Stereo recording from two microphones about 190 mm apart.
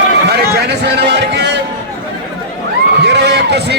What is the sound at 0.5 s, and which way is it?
Speech, 60° right (ahead or behind).